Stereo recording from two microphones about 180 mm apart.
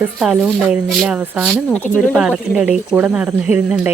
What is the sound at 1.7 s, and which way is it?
Speech, 10° left (ahead or behind).